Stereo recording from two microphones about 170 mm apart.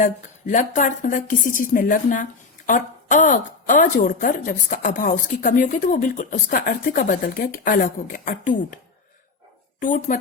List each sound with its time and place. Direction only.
0.0 s a woman's voice: 50° left (ahead or behind)
9.8 s a woman's voice: 50° left (ahead or behind)